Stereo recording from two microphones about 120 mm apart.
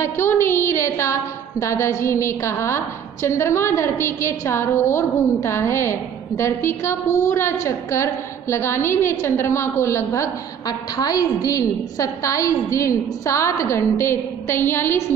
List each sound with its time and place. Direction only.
0.0 s a woman's voice: 20° left (ahead or behind)